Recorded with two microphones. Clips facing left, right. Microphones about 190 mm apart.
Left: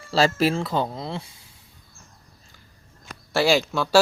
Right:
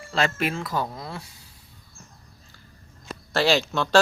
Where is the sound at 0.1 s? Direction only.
35° left (ahead or behind).